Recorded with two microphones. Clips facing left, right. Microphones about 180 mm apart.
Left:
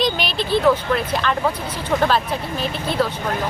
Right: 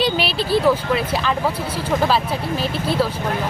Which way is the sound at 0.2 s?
35° right (ahead or behind).